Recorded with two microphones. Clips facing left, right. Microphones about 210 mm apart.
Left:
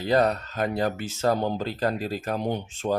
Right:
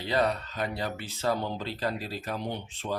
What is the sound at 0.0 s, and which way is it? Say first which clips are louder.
Speech: left 5 dB; 45° left (ahead or behind).